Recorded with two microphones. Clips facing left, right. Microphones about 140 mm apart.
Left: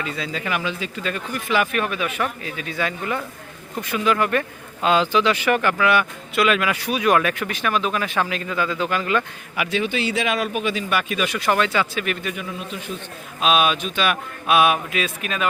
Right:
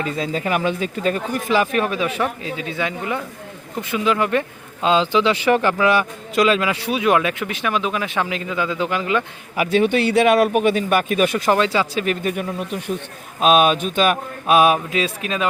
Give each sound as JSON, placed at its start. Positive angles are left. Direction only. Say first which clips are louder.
{"t": 0.0, "sound": "speech", "louder": "right 5 dB", "side_deg": -40}
{"t": 9.6, "sound": "speech", "louder": "right 7 dB", "side_deg": -55}
{"t": 11.4, "sound": "speech", "louder": "right 3 dB", "side_deg": -30}